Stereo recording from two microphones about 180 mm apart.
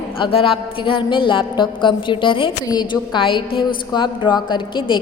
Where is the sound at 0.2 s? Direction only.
30° left (ahead or behind).